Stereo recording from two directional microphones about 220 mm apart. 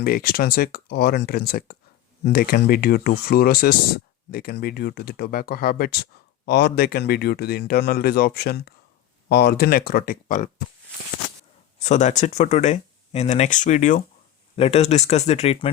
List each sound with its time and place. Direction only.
0.0 s speech: 45° left (ahead or behind)
11.8 s speech: 30° left (ahead or behind)